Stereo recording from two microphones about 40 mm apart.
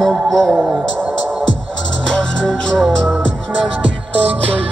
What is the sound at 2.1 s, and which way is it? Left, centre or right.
Music, left.